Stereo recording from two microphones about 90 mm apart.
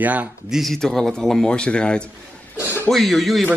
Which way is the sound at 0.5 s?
Centre (ahead or behind).